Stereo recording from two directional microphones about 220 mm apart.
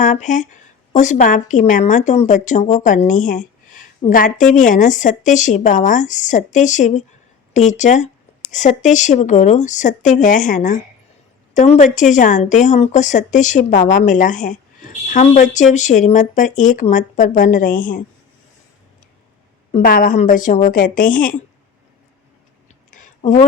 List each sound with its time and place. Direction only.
0.0 s speech: 35° left (ahead or behind)
19.7 s speech: 40° left (ahead or behind)
22.9 s a sound: 35° left (ahead or behind)